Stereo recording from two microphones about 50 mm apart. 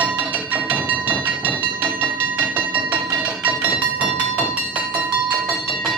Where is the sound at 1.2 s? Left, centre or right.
Right.